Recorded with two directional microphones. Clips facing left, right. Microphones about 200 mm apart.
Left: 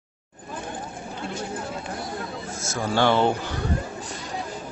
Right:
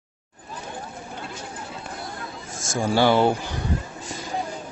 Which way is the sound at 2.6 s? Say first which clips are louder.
Right 2 dB; 15° right (ahead or behind).